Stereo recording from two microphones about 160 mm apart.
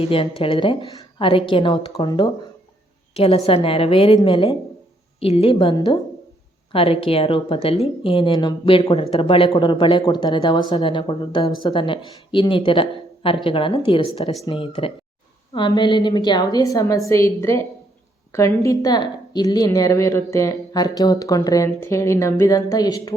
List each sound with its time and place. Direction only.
0.0 s a woman's voice: 35° left (ahead or behind)